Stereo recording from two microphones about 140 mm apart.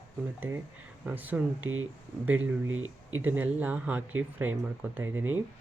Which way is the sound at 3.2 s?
10° right (ahead or behind).